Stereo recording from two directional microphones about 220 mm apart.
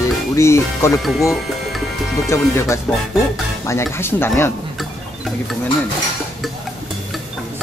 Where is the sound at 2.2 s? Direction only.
15° left (ahead or behind).